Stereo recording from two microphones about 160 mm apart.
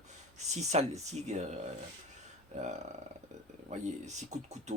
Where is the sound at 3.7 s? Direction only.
45° right (ahead or behind).